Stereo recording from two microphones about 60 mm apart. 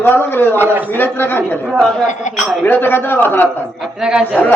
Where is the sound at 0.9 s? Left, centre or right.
Left.